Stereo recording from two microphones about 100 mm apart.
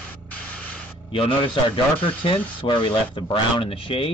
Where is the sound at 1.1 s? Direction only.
60° left (ahead or behind).